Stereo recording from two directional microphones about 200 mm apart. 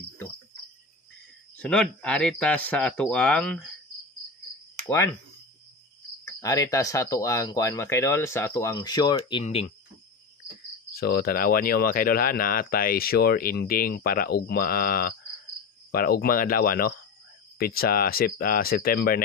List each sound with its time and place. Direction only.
1.6 s speech: 5° left (ahead or behind)
4.8 s speech: 15° left (ahead or behind)
6.2 s speech: 15° left (ahead or behind)
10.9 s speech: 50° left (ahead or behind)